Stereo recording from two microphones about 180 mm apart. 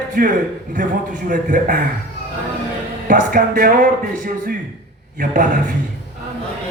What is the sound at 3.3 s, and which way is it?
A man's voice, 55° right (ahead or behind).